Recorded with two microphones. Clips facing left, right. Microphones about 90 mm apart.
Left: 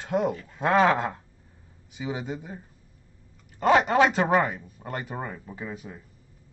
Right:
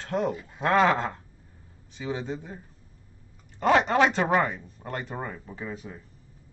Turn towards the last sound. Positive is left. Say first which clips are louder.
# even
turn(degrees=5)  # may be behind; listen again after turning